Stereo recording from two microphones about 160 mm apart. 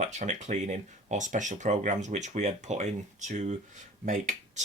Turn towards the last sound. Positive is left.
turn(degrees=-50)  # may be behind; listen again after turning